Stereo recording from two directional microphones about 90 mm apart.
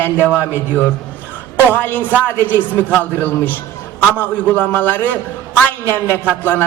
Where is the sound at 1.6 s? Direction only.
20° left (ahead or behind).